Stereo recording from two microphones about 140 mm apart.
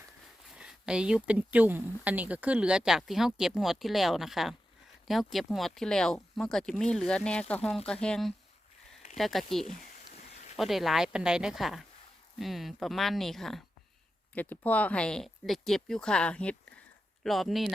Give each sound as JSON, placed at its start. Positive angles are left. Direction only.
{"t": 0.5, "sound": "speech", "side_deg": -5}
{"t": 9.6, "sound": "a sound", "side_deg": 70}
{"t": 10.6, "sound": "speech", "side_deg": 0}